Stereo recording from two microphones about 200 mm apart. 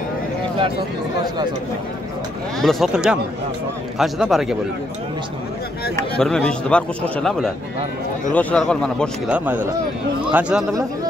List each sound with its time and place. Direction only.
2.6 s a man's voice: centre (ahead or behind)
6.1 s a man's voice: 5° left (ahead or behind)